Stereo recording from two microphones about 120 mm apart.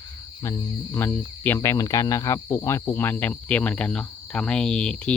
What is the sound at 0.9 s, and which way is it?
Speech, 15° left (ahead or behind).